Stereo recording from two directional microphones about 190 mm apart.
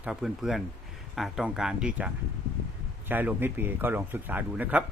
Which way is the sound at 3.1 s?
10° right (ahead or behind).